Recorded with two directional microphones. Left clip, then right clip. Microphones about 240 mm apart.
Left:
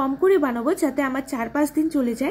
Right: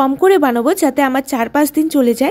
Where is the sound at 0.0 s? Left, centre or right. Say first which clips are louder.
Right 8 dB; right.